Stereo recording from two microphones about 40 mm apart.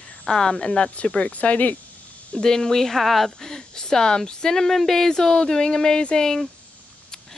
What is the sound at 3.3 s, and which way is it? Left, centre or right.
Speech, centre.